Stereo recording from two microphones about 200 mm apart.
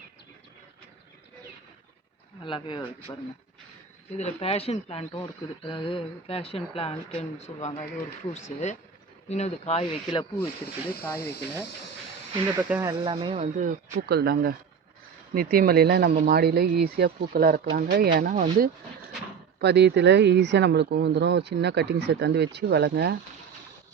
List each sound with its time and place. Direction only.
2.4 s speech: 25° left (ahead or behind)
4.2 s speech: 30° left (ahead or behind)
10.9 s speech: 50° left (ahead or behind)
12.5 s speech: 5° right (ahead or behind)
12.9 s speech: 25° right (ahead or behind); by 18.4 s 40° right (ahead or behind)
19.5 s speech: 60° right (ahead or behind)